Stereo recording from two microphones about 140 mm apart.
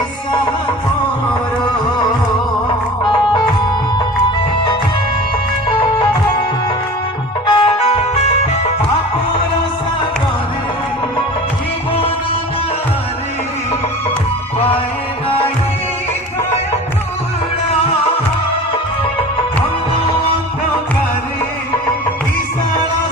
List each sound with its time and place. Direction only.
7.4 s music: 35° left (ahead or behind)